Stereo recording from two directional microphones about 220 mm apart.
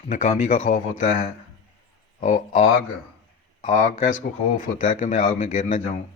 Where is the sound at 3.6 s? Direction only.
40° left (ahead or behind).